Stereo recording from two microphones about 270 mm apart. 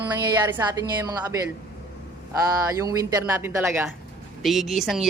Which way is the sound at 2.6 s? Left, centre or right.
Centre.